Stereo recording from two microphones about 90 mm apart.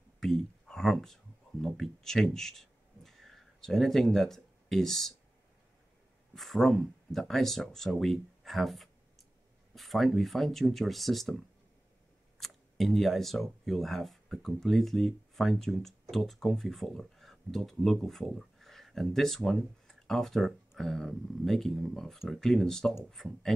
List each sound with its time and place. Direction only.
0.2 s speech: 5° left (ahead or behind)
6.3 s speech: centre (ahead or behind)